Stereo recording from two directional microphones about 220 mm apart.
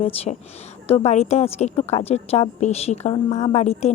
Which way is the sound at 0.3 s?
25° left (ahead or behind).